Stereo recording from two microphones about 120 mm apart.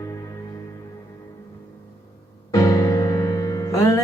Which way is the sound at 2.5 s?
25° left (ahead or behind).